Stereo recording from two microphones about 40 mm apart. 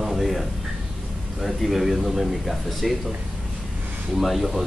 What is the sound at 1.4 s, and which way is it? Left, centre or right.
Speech, centre.